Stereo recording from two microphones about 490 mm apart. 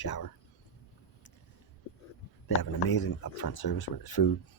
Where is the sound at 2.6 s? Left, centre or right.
Left.